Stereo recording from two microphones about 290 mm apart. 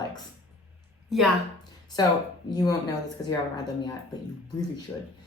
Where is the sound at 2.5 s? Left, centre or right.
Centre.